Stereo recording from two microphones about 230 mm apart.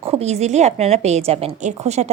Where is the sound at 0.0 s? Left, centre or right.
Right.